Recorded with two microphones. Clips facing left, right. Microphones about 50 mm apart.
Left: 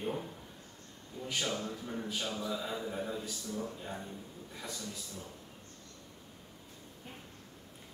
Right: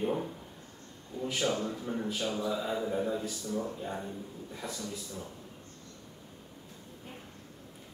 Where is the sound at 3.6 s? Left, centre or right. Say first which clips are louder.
Right 5 dB; centre.